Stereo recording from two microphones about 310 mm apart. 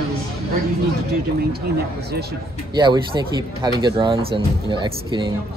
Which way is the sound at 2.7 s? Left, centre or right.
Centre.